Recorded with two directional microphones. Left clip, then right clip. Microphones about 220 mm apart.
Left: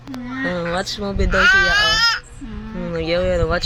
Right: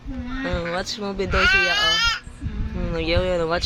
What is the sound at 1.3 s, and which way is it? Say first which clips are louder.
Speech: left 5 dB; 20° right (ahead or behind).